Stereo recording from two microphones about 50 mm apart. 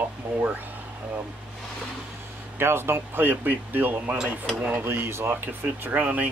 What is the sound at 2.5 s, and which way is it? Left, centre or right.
Speech, right.